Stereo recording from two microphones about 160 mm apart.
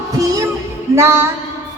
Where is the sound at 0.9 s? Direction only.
15° right (ahead or behind).